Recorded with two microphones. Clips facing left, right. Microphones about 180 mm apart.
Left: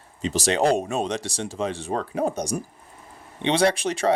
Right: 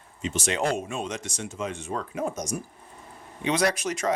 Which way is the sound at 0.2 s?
35° left (ahead or behind).